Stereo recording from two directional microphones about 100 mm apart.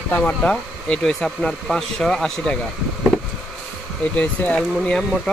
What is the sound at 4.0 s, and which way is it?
Speech, 15° left (ahead or behind).